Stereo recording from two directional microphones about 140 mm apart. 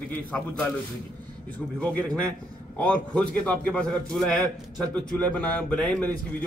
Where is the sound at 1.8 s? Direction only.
5° left (ahead or behind).